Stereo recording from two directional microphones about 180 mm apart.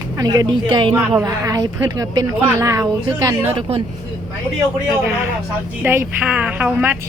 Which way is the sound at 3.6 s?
35° right (ahead or behind).